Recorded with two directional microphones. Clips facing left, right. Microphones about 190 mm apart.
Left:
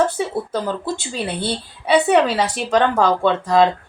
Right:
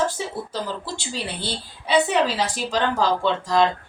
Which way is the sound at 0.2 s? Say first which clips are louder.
Left 7 dB; 55° left (ahead or behind).